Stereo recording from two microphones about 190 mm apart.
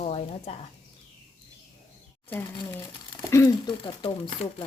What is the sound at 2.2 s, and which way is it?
Speech, 10° left (ahead or behind).